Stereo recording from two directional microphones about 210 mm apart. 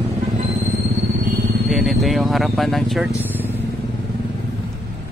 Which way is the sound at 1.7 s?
Centre (ahead or behind).